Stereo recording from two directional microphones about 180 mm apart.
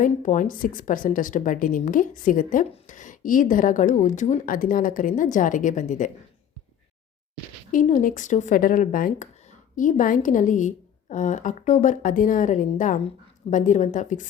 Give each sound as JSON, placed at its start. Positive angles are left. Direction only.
{"t": 0.0, "sound": "speech", "side_deg": 45}
{"t": 7.7, "sound": "speech", "side_deg": 45}